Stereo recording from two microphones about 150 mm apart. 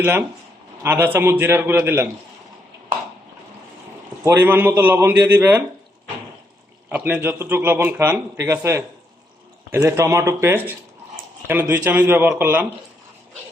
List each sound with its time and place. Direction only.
0.0 s speech: 15° right (ahead or behind)
4.2 s speech: 15° right (ahead or behind)
6.9 s speech: 15° right (ahead or behind)